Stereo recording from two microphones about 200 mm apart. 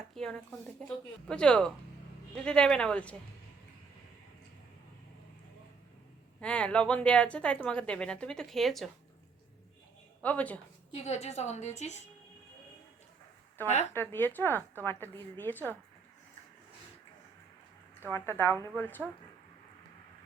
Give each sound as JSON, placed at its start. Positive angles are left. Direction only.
{"t": 0.1, "sound": "a woman's voice", "side_deg": 5}
{"t": 6.4, "sound": "a woman's voice", "side_deg": 5}
{"t": 10.2, "sound": "a woman's voice", "side_deg": 5}
{"t": 11.0, "sound": "a woman's voice", "side_deg": 35}
{"t": 13.9, "sound": "a woman's voice", "side_deg": 10}
{"t": 18.1, "sound": "a woman's voice", "side_deg": 10}
{"t": 18.5, "sound": "a woman's voice", "side_deg": -15}
{"t": 18.8, "sound": "a woman's voice", "side_deg": 10}